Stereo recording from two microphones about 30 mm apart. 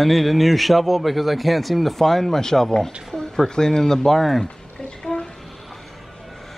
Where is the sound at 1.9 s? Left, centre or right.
Centre.